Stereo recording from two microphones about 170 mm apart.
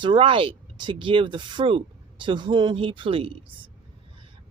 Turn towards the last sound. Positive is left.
turn(degrees=-30)  # may be behind; listen again after turning